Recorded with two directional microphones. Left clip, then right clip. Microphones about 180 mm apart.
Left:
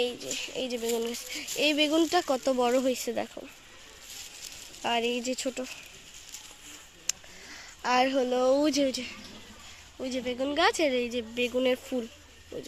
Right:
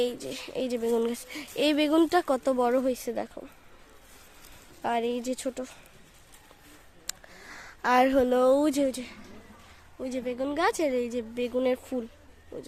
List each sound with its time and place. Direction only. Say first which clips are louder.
0.0 s speech: right 1 dB; 30° right (ahead or behind); by 3.5 s 5° right (ahead or behind)
4.8 s speech: even; 10° right (ahead or behind)
7.1 s a sound: left 4 dB; 30° right (ahead or behind)
8.5 s speech: right 1 dB; 10° right (ahead or behind)